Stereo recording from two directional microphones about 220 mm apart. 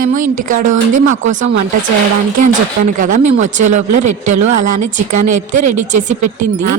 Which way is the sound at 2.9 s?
35° right (ahead or behind).